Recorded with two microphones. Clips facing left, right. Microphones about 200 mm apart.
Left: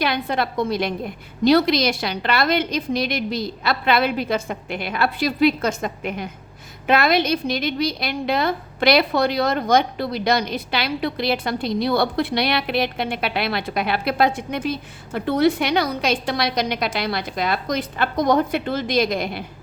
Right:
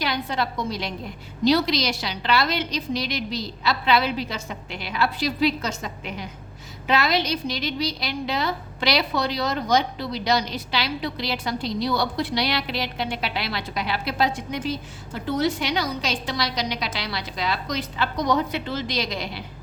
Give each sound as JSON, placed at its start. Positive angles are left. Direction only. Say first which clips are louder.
{"t": 0.0, "sound": "a woman's voice", "louder": "left 4 dB", "side_deg": 55}